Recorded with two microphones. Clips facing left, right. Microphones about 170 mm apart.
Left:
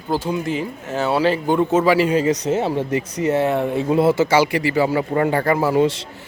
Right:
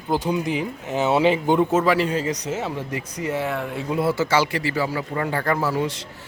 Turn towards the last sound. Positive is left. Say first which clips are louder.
# left 6 dB
turn(degrees=25)  # may be behind; listen again after turning